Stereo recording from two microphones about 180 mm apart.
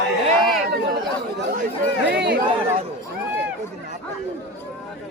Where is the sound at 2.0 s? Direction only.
70° right (ahead or behind).